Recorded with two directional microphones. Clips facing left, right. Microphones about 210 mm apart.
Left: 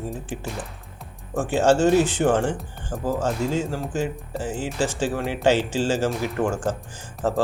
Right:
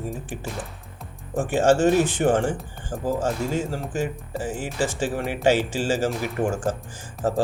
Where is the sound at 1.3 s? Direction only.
15° right (ahead or behind).